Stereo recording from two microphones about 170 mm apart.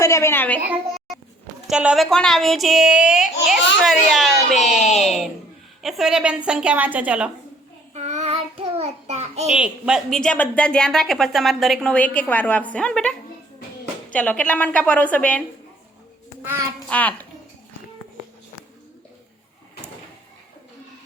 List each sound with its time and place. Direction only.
0.0 s a woman's voice: 15° left (ahead or behind)
0.7 s a sound: centre (ahead or behind)
1.6 s a woman's voice: 5° right (ahead or behind)
7.9 s child singing: 40° right (ahead or behind)
9.5 s a woman's voice: 5° right (ahead or behind)
16.9 s a woman's voice: 10° left (ahead or behind)